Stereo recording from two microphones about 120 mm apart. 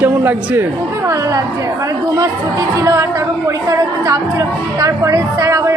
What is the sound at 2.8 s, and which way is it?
Speech, 25° right (ahead or behind).